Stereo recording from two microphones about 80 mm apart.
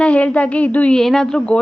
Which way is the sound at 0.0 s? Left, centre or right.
Centre.